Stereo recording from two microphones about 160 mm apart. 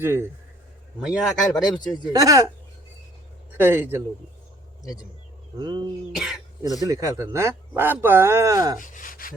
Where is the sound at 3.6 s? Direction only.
15° right (ahead or behind).